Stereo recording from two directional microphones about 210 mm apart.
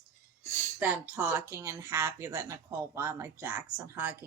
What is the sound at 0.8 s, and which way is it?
Speech, 10° right (ahead or behind).